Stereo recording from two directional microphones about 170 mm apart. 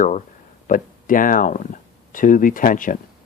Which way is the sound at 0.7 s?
55° left (ahead or behind).